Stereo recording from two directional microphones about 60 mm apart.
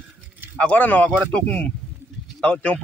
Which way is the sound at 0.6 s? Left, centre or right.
Left.